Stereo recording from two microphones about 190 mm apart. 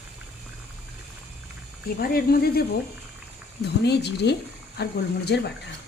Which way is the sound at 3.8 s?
60° left (ahead or behind).